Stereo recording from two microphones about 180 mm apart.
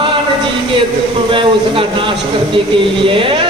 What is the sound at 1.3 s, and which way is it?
A woman's voice, 30° right (ahead or behind).